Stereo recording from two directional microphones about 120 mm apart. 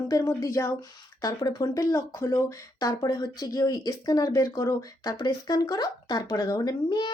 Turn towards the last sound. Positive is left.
turn(degrees=35)  # may be behind; listen again after turning